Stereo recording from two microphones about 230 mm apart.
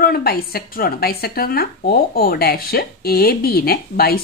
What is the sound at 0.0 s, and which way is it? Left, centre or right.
Speech, left.